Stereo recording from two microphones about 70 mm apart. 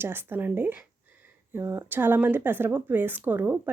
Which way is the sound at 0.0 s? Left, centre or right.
Right.